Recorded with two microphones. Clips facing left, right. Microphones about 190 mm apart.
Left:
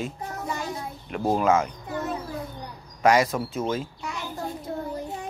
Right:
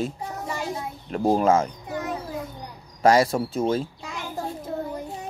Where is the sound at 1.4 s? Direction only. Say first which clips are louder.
Right 1 dB; 30° right (ahead or behind).